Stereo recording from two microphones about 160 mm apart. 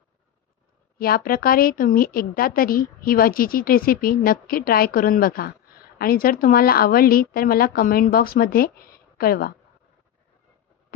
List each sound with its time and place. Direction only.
0.9 s a woman's voice: 65° left (ahead or behind)